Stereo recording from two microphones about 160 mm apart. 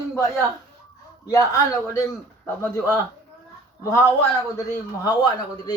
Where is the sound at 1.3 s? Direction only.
20° left (ahead or behind).